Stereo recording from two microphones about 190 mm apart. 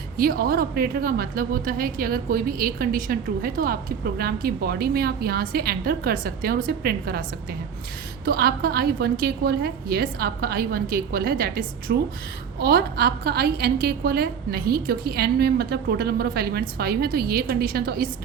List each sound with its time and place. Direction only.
0.2 s a woman's voice: 50° right (ahead or behind)